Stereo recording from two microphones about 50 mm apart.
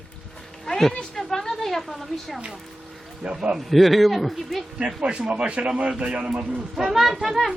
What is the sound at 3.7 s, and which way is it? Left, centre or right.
Speech, centre.